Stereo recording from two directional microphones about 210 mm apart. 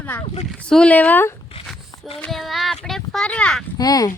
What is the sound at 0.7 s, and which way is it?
Speech, 5° left (ahead or behind).